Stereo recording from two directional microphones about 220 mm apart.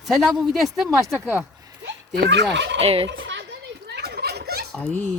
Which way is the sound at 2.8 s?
25° right (ahead or behind).